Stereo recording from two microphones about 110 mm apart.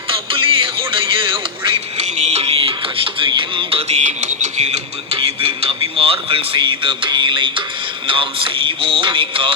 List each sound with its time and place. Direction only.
0.1 s music: 50° right (ahead or behind)
2.0 s music: 90° right; by 7.5 s 45° right (ahead or behind)
8.0 s a sound: 50° right (ahead or behind)